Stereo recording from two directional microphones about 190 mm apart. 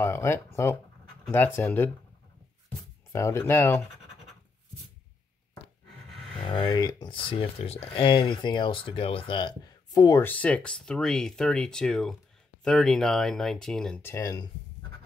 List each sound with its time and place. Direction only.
0.0 s speech: 15° left (ahead or behind)
3.1 s speech: 15° left (ahead or behind)
6.4 s speech: 25° left (ahead or behind)
9.9 s speech: 15° left (ahead or behind)